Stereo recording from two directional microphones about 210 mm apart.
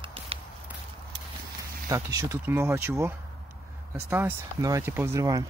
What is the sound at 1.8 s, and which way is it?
Speech, 15° right (ahead or behind).